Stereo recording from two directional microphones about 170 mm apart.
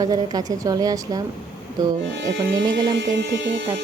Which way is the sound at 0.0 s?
20° right (ahead or behind).